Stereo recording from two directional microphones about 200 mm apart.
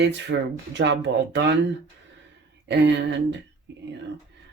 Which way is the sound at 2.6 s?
60° right (ahead or behind).